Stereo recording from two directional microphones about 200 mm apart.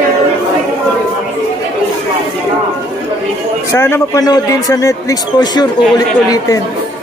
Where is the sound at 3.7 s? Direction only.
10° left (ahead or behind).